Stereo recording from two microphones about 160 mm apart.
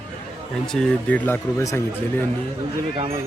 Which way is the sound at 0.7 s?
5° left (ahead or behind).